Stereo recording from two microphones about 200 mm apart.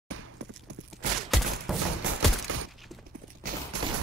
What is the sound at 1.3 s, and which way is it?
Fusillade, centre (ahead or behind).